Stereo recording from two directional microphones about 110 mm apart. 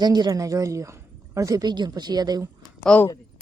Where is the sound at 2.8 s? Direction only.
10° left (ahead or behind).